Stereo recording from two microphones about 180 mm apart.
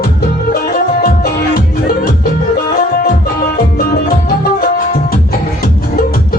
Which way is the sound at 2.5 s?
55° left (ahead or behind).